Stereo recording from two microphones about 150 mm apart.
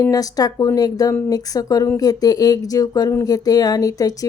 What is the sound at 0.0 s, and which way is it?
Speech, 25° left (ahead or behind).